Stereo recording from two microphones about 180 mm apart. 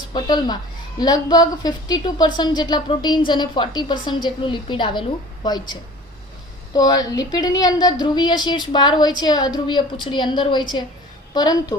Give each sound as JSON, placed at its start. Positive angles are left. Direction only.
{"t": 0.1, "sound": "speech", "side_deg": 25}
{"t": 6.7, "sound": "speech", "side_deg": 20}